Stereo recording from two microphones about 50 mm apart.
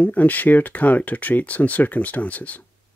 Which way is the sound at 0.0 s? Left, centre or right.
Left.